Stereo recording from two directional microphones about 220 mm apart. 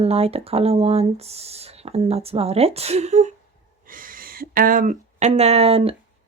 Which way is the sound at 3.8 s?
40° right (ahead or behind).